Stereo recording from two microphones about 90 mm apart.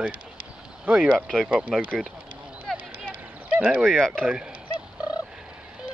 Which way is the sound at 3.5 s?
15° right (ahead or behind).